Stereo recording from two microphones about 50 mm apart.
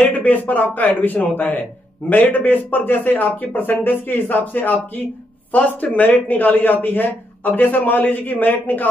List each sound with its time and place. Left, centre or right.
0.0 s speech: left